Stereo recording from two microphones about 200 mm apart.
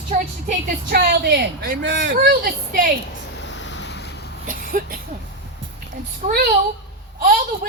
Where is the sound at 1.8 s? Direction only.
65° right (ahead or behind); by 2.9 s 45° right (ahead or behind).